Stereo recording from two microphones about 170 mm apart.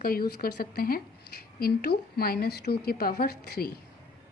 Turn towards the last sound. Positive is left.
turn(degrees=65)  # may be behind; listen again after turning